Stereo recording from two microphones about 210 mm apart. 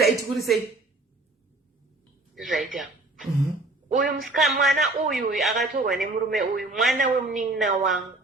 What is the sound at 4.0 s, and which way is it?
Speech, 40° right (ahead or behind).